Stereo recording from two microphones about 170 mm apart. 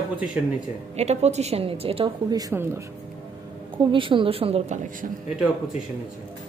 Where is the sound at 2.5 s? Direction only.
15° right (ahead or behind).